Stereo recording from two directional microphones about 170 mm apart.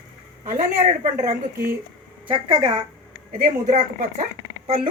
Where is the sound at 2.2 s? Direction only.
30° right (ahead or behind).